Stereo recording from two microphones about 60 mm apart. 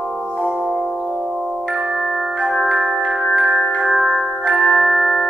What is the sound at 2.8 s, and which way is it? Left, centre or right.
Glockenspiel, centre.